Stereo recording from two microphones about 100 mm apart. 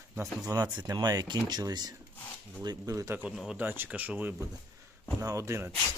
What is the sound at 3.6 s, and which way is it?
Speech, 20° right (ahead or behind).